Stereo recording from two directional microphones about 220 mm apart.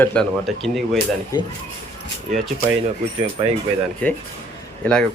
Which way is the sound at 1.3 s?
15° left (ahead or behind).